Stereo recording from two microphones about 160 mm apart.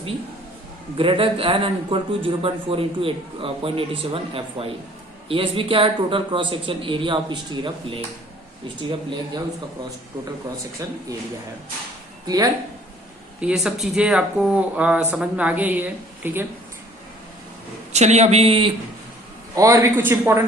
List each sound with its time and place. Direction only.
0.9 s a man's voice: 35° right (ahead or behind)
13.4 s speech: 5° right (ahead or behind)
17.9 s a man's voice: 45° right (ahead or behind)
19.5 s speech: 20° right (ahead or behind)